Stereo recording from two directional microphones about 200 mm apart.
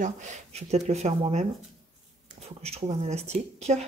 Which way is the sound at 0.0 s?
35° right (ahead or behind).